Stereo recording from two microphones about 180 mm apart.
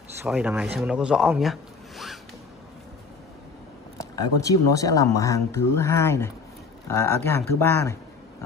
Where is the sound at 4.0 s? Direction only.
20° left (ahead or behind).